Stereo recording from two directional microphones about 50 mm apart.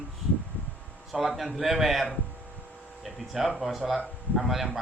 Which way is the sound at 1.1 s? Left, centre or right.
Centre.